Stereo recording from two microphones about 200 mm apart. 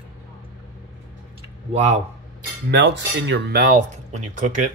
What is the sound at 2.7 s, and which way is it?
Speech, 60° right (ahead or behind).